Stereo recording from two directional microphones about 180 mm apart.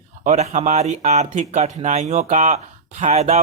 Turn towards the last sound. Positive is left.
turn(degrees=-40)  # may be behind; listen again after turning